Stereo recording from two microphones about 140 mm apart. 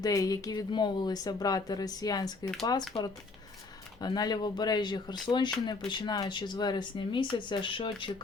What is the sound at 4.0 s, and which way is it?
Speech, 30° left (ahead or behind).